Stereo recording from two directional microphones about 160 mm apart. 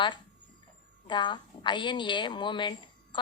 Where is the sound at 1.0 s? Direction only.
30° left (ahead or behind).